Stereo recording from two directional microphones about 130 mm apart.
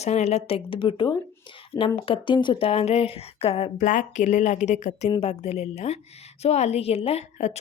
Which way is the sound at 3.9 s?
70° left (ahead or behind).